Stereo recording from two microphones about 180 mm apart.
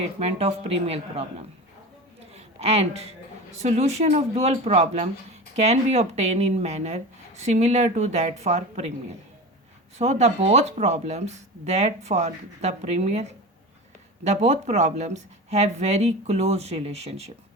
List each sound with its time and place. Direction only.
0.0 s a woman's voice: 35° right (ahead or behind)
10.0 s speech: 40° right (ahead or behind)
14.3 s speech: 40° right (ahead or behind)